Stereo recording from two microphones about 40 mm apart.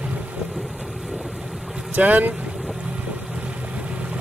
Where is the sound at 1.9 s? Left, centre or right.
Right.